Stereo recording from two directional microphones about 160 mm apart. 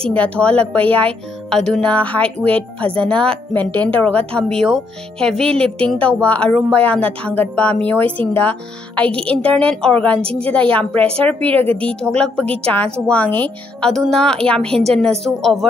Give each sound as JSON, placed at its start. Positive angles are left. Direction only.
{"t": 0.1, "sound": "speech", "side_deg": 10}
{"t": 11.4, "sound": "speech", "side_deg": -35}
{"t": 11.8, "sound": "a woman's voice", "side_deg": 5}